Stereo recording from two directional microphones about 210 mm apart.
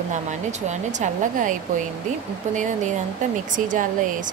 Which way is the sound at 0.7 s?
35° right (ahead or behind).